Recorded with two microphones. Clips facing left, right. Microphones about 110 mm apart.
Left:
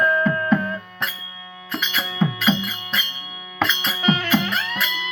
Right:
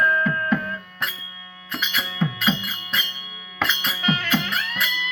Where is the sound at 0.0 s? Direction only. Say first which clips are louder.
Left 2 dB; 15° left (ahead or behind).